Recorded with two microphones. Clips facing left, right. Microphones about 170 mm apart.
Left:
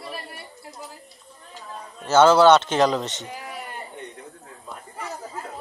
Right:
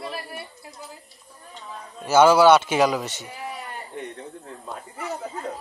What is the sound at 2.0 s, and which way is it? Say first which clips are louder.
A man's voice: even; 10° right (ahead or behind).